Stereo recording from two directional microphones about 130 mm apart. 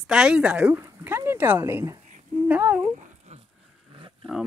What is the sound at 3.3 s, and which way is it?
Dog, 60° right (ahead or behind).